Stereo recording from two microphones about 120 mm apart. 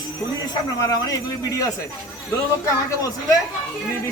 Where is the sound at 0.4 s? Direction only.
35° left (ahead or behind).